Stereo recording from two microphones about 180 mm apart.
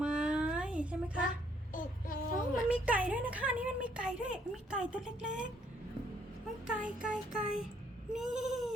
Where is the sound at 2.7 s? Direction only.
10° right (ahead or behind).